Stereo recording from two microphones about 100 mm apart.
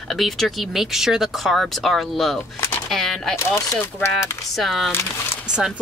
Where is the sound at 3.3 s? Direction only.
30° left (ahead or behind).